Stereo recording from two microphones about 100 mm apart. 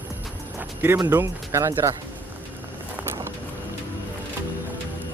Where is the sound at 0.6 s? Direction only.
20° right (ahead or behind).